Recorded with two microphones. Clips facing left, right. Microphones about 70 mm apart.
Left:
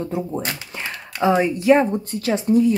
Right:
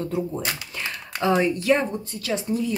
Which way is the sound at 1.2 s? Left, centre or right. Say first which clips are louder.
Left 4 dB; centre.